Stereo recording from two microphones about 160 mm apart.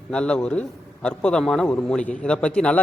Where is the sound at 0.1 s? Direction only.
5° left (ahead or behind).